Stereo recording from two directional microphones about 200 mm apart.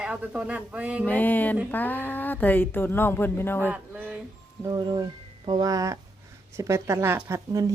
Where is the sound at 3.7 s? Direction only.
5° right (ahead or behind).